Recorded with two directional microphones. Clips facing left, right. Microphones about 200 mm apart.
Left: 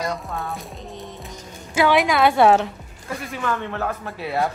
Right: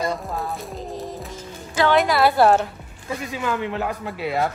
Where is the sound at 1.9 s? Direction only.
Centre (ahead or behind).